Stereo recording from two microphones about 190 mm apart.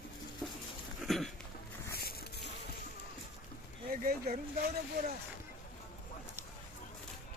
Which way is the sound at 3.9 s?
50° right (ahead or behind).